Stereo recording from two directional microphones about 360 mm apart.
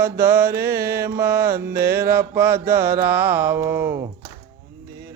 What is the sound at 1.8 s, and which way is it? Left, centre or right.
Mantra, centre.